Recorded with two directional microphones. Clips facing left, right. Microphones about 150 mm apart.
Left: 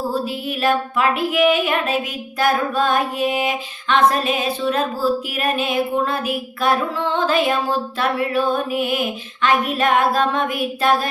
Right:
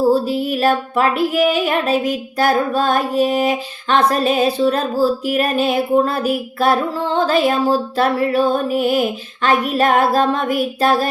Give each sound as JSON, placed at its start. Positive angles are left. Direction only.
{"t": 0.1, "sound": "music", "side_deg": -35}